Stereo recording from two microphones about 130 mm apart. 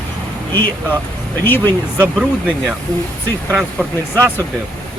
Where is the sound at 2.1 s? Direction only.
10° right (ahead or behind).